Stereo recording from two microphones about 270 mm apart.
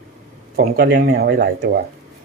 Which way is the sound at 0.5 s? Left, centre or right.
Right.